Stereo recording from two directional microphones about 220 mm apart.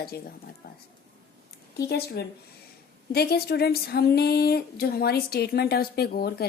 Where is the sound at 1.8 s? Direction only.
45° left (ahead or behind).